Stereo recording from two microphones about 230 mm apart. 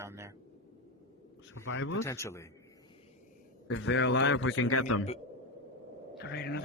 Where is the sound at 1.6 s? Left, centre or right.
Left.